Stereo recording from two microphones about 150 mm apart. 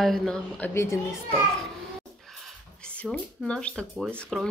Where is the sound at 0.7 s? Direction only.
20° left (ahead or behind).